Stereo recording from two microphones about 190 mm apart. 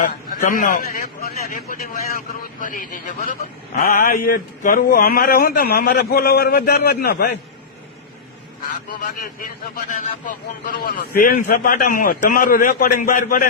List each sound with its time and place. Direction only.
0.0 s a man's voice: 45° left (ahead or behind)
8.9 s a man's voice: 50° left (ahead or behind)